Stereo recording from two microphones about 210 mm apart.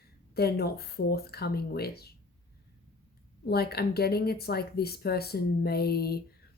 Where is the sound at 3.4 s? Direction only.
50° left (ahead or behind).